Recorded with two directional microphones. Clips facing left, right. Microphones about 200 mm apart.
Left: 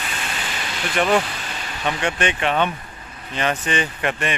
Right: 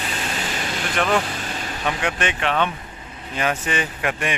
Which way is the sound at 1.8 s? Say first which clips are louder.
Left 2 dB; 5° right (ahead or behind).